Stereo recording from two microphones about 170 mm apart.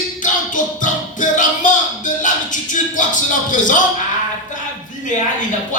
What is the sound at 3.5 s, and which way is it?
Speech, 50° left (ahead or behind).